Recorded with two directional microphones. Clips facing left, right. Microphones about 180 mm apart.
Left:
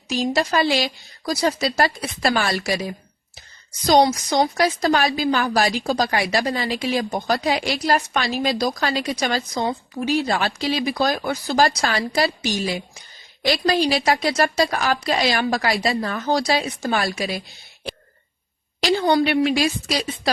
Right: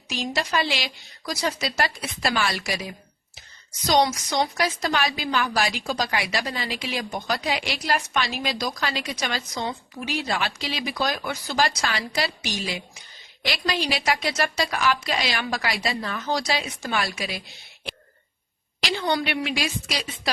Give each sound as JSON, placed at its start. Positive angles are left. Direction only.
{"t": 0.1, "sound": "a woman's voice", "side_deg": 40}
{"t": 3.8, "sound": "a woman's voice", "side_deg": 30}
{"t": 18.9, "sound": "a woman's voice", "side_deg": 35}